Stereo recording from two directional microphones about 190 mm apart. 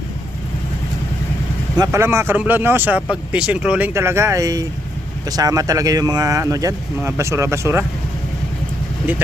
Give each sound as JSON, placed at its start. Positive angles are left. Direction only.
{"t": 1.7, "sound": "speech", "side_deg": -20}